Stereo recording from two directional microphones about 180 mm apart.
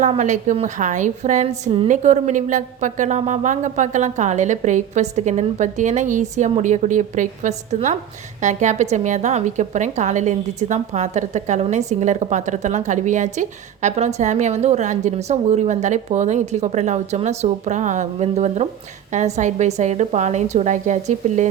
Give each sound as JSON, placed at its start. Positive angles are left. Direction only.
{"t": 0.2, "sound": "a woman's voice", "side_deg": -40}